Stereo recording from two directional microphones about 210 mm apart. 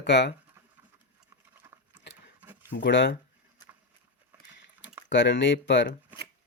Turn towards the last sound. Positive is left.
turn(degrees=60)  # may be behind; listen again after turning